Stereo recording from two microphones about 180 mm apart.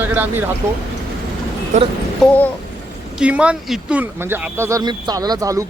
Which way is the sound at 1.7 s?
40° right (ahead or behind).